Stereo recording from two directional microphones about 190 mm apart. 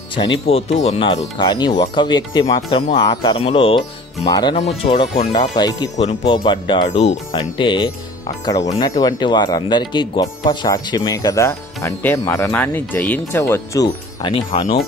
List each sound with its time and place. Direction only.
0.1 s speech: 25° left (ahead or behind)
5.9 s speech: 35° left (ahead or behind)
6.3 s speech: 25° left (ahead or behind)
13.8 s speech: 25° left (ahead or behind)